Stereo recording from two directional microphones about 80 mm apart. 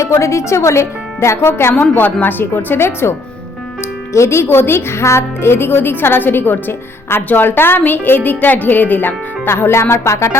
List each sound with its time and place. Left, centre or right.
0.0 s speech: left